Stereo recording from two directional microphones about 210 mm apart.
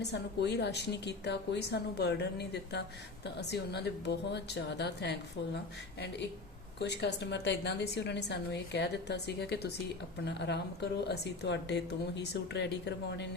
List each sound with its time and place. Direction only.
0.0 s a woman's voice: 55° left (ahead or behind)
6.7 s a woman's voice: 55° left (ahead or behind)